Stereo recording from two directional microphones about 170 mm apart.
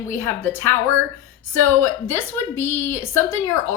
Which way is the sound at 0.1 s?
15° left (ahead or behind).